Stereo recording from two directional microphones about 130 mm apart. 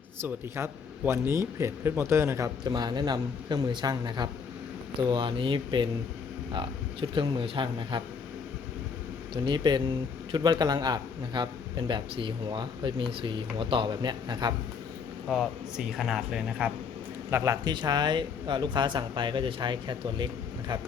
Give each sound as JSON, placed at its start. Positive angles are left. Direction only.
{"t": 0.2, "sound": "speech", "side_deg": -20}
{"t": 2.6, "sound": "a man's voice", "side_deg": -35}
{"t": 9.3, "sound": "a man's voice", "side_deg": -35}
{"t": 15.3, "sound": "speech", "side_deg": 0}
{"t": 17.3, "sound": "speech", "side_deg": -20}
{"t": 17.7, "sound": "a man's voice", "side_deg": -35}